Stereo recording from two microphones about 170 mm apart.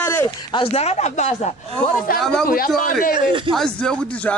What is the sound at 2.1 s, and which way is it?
Speech, 60° left (ahead or behind).